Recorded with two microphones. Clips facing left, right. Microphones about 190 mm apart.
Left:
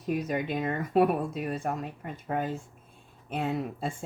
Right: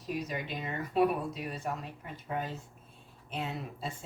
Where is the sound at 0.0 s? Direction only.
55° left (ahead or behind).